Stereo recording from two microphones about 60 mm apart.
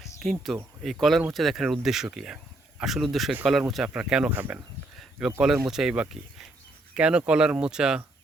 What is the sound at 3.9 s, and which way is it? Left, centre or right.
Speech, centre.